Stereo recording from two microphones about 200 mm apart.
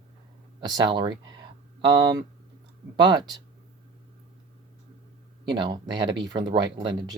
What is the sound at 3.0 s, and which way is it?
Speech, 20° right (ahead or behind).